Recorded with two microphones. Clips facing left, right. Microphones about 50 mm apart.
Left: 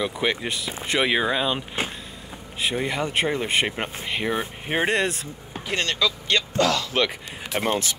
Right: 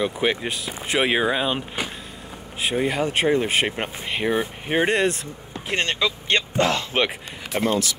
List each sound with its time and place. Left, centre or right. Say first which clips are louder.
0.0 s speech: right 2 dB; centre
2.7 s speech: right 4 dB; centre
5.7 s speech: right 1 dB; right
7.5 s speech: right 2 dB; left